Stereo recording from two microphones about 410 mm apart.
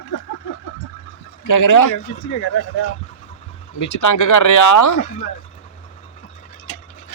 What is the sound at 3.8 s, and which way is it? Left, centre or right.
Speech, left.